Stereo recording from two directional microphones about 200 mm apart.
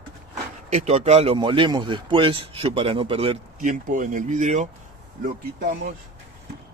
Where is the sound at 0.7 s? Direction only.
35° right (ahead or behind).